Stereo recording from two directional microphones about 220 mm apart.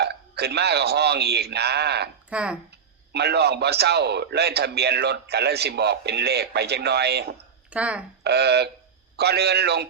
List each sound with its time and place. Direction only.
0.0 s a man's voice: 50° right (ahead or behind)
2.3 s speech: 5° right (ahead or behind)
3.1 s a man's voice: 50° right (ahead or behind)
7.7 s speech: 5° right (ahead or behind)
8.2 s a man's voice: 50° right (ahead or behind)